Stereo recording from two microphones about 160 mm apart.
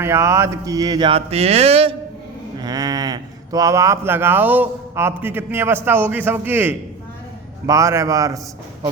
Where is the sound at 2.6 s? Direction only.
25° right (ahead or behind).